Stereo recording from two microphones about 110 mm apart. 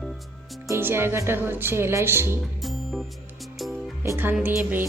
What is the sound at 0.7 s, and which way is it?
Speech, 20° right (ahead or behind).